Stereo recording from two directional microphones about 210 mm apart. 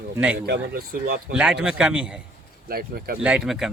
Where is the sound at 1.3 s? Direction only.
5° right (ahead or behind).